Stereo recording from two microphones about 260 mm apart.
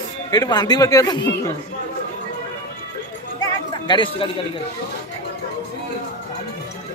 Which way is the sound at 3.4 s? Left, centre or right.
Centre.